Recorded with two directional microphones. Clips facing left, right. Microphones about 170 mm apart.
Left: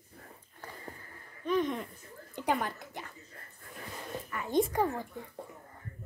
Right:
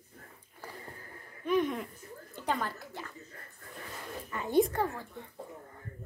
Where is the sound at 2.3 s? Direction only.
15° left (ahead or behind).